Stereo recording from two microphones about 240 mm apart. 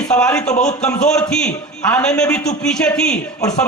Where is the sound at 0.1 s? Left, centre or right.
Centre.